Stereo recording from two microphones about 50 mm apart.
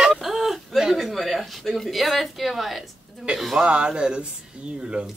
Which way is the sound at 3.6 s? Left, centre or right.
Centre.